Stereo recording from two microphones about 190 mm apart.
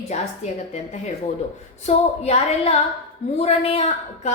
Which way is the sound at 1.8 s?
35° left (ahead or behind).